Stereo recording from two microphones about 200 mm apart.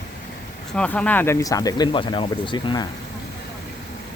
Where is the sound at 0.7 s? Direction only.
5° left (ahead or behind); by 2.9 s 20° left (ahead or behind).